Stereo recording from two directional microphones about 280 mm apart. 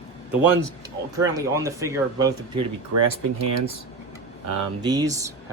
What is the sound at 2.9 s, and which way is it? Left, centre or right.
Speech, right.